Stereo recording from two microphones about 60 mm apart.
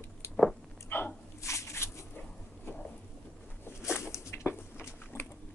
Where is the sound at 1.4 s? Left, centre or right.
Left.